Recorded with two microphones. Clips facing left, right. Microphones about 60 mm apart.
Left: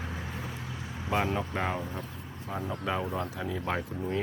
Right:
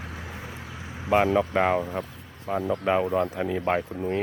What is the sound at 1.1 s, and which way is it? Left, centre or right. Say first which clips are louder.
Speech: right 9 dB; right.